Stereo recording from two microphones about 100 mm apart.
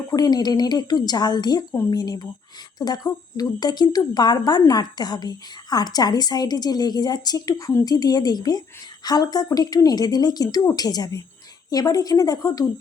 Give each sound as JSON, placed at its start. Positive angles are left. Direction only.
{"t": 0.1, "sound": "a woman's voice", "side_deg": 40}